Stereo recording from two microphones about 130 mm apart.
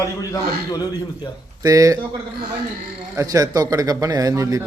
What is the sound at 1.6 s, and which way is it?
Speech, 25° right (ahead or behind).